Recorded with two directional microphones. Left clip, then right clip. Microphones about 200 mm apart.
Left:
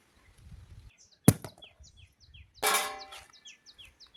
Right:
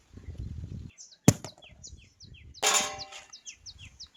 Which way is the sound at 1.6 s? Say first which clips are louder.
Right 3 dB; 40° right (ahead or behind).